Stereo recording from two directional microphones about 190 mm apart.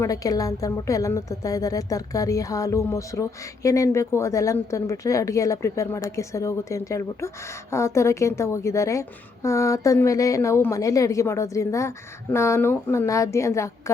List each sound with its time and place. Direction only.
0.0 s a woman's voice: 20° left (ahead or behind)